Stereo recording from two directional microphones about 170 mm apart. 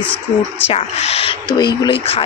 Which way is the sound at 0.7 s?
35° left (ahead or behind).